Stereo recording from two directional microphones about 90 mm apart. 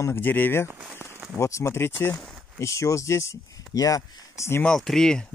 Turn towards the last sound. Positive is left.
turn(degrees=5)  # may be behind; listen again after turning